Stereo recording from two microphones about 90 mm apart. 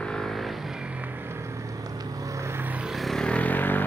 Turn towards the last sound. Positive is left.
turn(degrees=20)  # may be behind; listen again after turning